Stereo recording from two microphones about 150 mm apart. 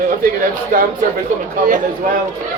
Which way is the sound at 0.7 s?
65° right (ahead or behind).